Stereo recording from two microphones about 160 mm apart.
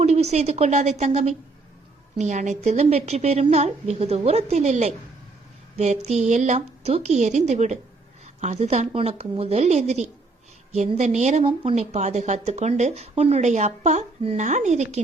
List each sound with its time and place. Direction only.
0.0 s speech: 45° right (ahead or behind)
5.7 s a sound: 45° right (ahead or behind)
6.1 s speech: 45° right (ahead or behind)